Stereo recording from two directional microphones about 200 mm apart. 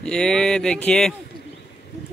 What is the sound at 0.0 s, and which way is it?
Speech, 5° left (ahead or behind).